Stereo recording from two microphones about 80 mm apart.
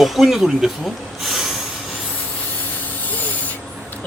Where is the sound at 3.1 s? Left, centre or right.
Left.